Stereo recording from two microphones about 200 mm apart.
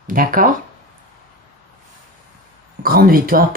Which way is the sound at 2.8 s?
45° right (ahead or behind).